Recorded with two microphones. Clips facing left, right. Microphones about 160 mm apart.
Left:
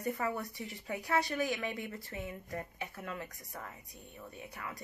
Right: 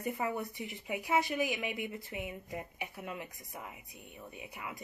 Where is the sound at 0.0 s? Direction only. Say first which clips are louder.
Even; 15° right (ahead or behind).